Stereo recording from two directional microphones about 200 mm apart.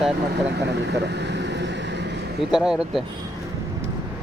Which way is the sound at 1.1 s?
60° right (ahead or behind).